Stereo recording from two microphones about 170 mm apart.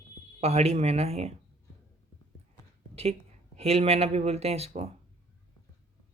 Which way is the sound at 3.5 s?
40° right (ahead or behind).